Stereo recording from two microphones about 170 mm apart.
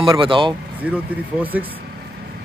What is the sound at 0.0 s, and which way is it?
Speech, 30° right (ahead or behind).